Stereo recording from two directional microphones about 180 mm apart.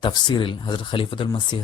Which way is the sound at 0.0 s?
25° left (ahead or behind).